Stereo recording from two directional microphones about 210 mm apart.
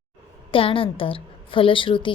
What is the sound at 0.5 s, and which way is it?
A woman's voice, 25° left (ahead or behind).